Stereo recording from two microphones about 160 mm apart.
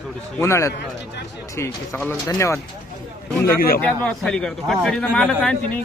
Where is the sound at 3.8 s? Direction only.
5° left (ahead or behind).